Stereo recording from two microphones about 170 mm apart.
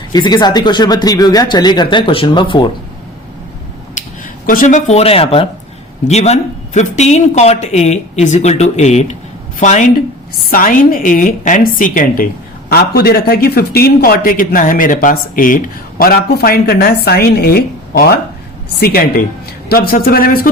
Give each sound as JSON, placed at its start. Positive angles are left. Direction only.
{"t": 0.1, "sound": "speech", "side_deg": 25}
{"t": 4.4, "sound": "a woman's voice", "side_deg": 50}